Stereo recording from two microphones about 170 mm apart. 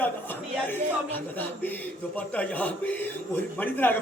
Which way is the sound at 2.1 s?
10° left (ahead or behind).